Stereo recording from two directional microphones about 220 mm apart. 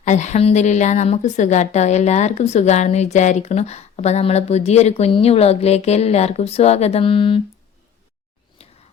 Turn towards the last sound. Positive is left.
turn(degrees=25)  # may be behind; listen again after turning